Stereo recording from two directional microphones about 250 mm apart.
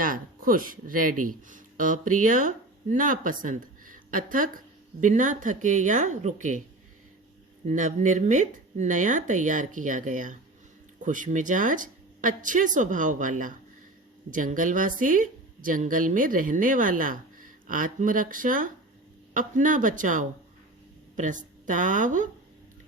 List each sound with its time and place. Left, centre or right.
0.0 s speech: right
1.1 s speech: right
1.5 s speech: right
7.7 s a woman's voice: right